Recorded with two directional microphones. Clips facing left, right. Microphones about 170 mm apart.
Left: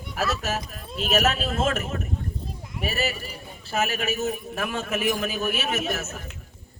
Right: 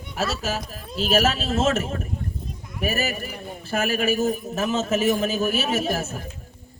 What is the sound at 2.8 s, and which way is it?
A man's voice, 45° right (ahead or behind).